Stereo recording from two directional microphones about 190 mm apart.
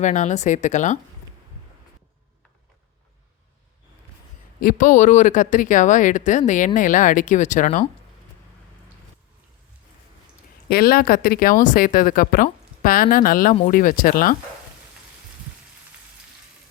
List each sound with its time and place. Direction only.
0.0 s speech: 40° left (ahead or behind)
4.6 s speech: 45° left (ahead or behind)
10.7 s speech: 50° left (ahead or behind)